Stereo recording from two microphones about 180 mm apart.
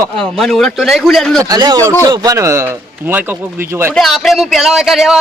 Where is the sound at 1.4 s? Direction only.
20° right (ahead or behind).